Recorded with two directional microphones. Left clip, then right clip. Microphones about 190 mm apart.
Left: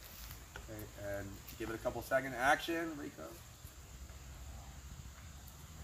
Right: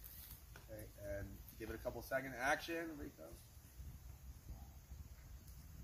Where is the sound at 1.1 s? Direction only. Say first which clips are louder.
Left 5 dB; 25° right (ahead or behind).